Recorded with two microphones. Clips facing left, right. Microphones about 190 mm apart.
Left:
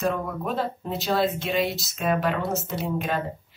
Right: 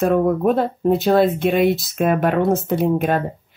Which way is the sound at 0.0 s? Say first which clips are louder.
Right 11 dB; 55° right (ahead or behind).